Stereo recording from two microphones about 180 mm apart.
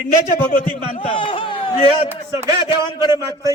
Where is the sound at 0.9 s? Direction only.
30° left (ahead or behind).